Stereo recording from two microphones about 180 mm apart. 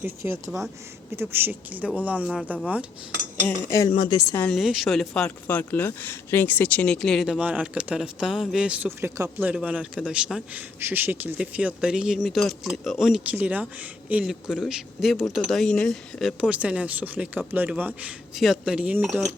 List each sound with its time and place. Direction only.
0.0 s speech: 15° right (ahead or behind)
3.4 s speech: 20° left (ahead or behind)
4.4 s a woman's voice: 10° left (ahead or behind); by 19.2 s 10° right (ahead or behind)